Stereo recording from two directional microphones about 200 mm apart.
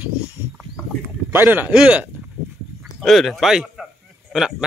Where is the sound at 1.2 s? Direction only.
10° right (ahead or behind).